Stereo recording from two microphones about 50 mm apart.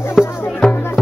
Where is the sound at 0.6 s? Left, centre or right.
Centre.